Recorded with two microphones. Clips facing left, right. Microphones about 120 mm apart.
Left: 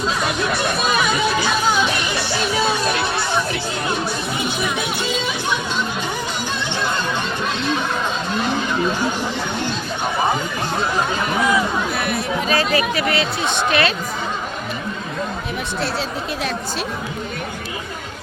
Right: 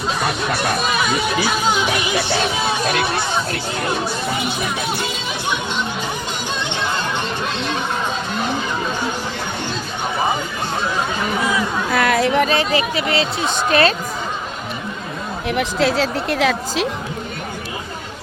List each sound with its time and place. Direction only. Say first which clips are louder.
11.9 s speech: right 6 dB; 90° right
12.5 s speech: even; 25° right (ahead or behind)
13.5 s speech: right 3 dB; 35° right (ahead or behind)
15.4 s speech: right 6 dB; 85° right